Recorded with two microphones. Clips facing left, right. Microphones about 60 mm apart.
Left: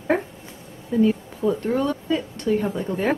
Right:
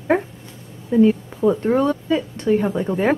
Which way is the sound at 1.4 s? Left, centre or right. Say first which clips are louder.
Right 5 dB; right.